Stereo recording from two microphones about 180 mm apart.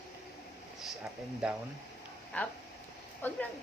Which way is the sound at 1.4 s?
5° right (ahead or behind).